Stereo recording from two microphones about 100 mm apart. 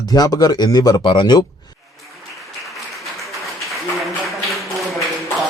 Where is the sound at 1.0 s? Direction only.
55° left (ahead or behind).